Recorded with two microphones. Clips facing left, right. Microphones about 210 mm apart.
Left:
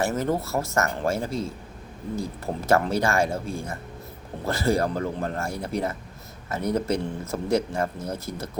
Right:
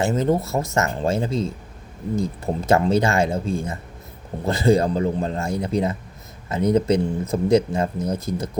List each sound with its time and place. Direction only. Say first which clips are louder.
0.0 s speech: right 4 dB; 20° right (ahead or behind)